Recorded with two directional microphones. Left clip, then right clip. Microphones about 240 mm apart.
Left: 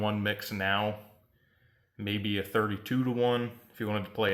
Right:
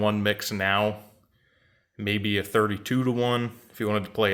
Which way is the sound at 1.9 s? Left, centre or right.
Right.